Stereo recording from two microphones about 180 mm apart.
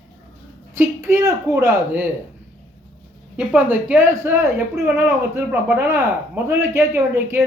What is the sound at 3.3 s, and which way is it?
A man's voice, 5° right (ahead or behind).